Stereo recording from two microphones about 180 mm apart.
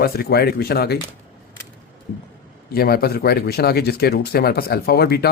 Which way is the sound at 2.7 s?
60° left (ahead or behind).